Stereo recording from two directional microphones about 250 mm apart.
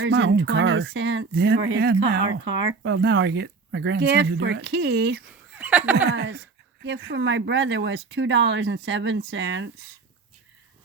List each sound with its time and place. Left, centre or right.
0.0 s speech: right
5.5 s speech: centre
6.1 s speech: right